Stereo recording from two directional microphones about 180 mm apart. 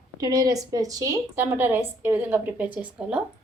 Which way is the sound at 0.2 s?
20° right (ahead or behind).